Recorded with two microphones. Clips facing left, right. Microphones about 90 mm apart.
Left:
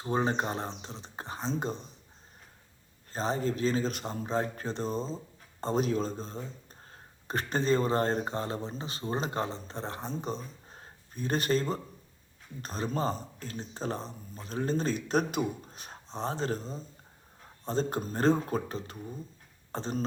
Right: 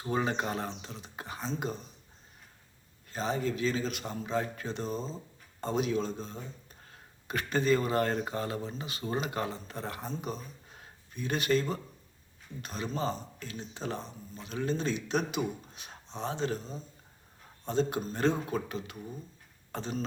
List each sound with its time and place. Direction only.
0.0 s speech: 30° left (ahead or behind)
3.1 s speech: 35° left (ahead or behind)